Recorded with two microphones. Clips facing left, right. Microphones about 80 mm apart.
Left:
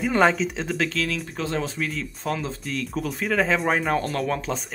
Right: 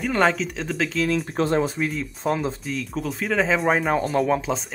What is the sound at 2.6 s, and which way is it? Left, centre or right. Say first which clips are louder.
Speech: even; centre.